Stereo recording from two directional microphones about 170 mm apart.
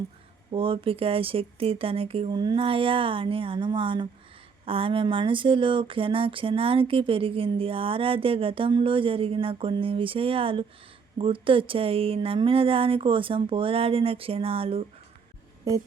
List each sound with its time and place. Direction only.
0.5 s speech: 30° right (ahead or behind)